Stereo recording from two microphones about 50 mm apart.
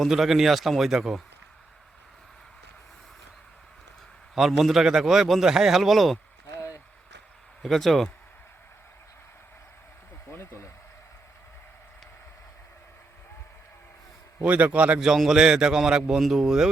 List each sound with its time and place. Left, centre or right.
0.1 s a man's voice: centre
4.4 s a man's voice: centre
7.6 s a man's voice: centre
10.3 s a sound: left
14.4 s a man's voice: right
14.9 s a man's voice: centre